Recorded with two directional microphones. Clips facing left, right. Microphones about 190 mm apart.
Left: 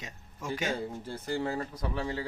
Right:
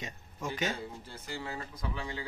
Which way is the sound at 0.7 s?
50° left (ahead or behind).